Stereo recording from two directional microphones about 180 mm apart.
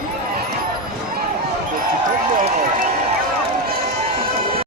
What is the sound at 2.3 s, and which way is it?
Run, 50° right (ahead or behind).